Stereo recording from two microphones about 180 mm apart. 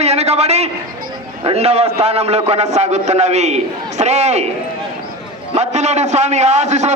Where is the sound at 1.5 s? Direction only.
35° right (ahead or behind).